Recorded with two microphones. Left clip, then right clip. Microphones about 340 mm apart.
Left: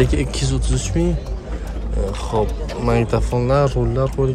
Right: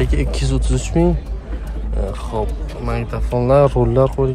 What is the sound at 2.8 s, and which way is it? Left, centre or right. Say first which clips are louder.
Speech: left 6 dB; centre.